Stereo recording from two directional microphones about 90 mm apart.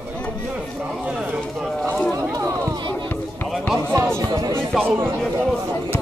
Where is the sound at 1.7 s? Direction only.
5° left (ahead or behind).